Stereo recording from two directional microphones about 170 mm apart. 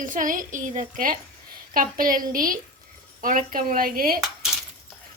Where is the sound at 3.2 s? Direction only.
55° right (ahead or behind).